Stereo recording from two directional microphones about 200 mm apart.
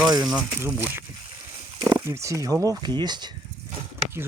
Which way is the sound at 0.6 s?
10° right (ahead or behind).